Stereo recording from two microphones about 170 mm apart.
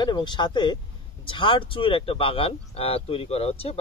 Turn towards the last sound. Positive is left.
turn(degrees=35)  # may be behind; listen again after turning